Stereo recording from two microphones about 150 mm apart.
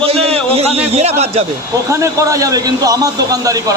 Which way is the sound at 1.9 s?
20° right (ahead or behind).